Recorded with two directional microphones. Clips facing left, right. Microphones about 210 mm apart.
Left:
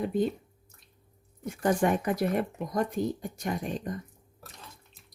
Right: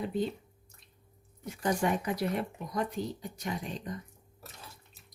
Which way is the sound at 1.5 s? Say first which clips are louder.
Left 4 dB; 50° left (ahead or behind).